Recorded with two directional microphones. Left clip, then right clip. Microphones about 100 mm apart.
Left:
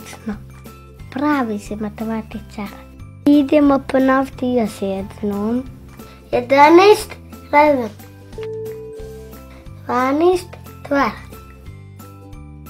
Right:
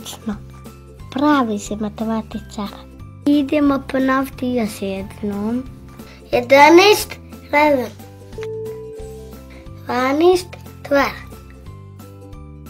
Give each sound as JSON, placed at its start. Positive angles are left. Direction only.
{"t": 0.2, "sound": "music", "side_deg": 0}
{"t": 1.1, "sound": "a child's voice", "side_deg": -10}
{"t": 3.3, "sound": "speech", "side_deg": 35}
{"t": 5.9, "sound": "a child's voice", "side_deg": 10}
{"t": 9.8, "sound": "a child's voice", "side_deg": 10}